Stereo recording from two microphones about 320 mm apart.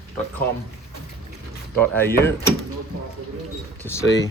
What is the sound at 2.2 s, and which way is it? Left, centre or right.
Speech, centre.